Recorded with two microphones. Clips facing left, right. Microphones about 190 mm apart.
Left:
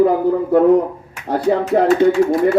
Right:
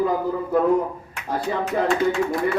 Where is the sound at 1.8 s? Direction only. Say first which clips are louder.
Left 9 dB; 40° left (ahead or behind).